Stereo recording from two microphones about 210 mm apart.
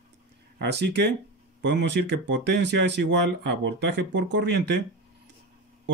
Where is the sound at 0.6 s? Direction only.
55° right (ahead or behind).